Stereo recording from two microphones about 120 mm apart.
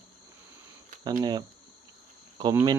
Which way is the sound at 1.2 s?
35° right (ahead or behind).